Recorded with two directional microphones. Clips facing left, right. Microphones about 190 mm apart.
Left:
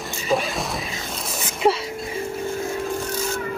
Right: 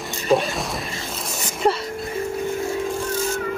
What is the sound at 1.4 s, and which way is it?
Music, centre (ahead or behind).